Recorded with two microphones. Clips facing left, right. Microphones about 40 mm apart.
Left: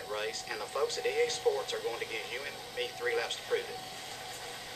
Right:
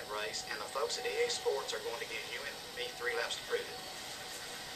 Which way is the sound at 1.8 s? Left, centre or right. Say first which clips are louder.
Left 4 dB; centre.